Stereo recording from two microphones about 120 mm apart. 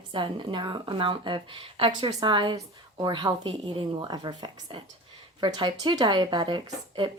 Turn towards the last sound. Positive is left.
turn(degrees=-40)  # may be behind; listen again after turning